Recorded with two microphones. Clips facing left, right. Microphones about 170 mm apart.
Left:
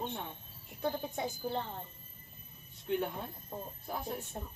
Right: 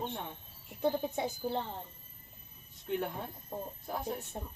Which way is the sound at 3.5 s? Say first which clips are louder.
Right 3 dB; 10° right (ahead or behind).